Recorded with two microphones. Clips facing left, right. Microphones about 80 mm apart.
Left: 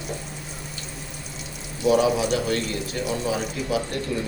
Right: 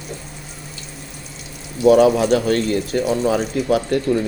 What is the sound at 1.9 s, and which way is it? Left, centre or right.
Speech, right.